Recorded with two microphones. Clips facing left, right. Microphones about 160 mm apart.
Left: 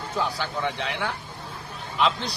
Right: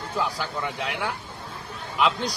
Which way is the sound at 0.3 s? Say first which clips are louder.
Left 1 dB; 10° right (ahead or behind).